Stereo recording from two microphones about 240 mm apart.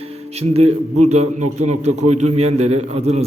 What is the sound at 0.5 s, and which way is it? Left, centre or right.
A man's voice, right.